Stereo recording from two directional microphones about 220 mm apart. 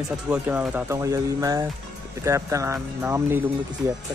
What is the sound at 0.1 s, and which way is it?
Speech, 5° right (ahead or behind).